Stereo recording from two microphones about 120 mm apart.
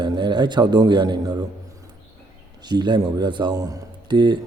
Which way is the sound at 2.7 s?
35° right (ahead or behind).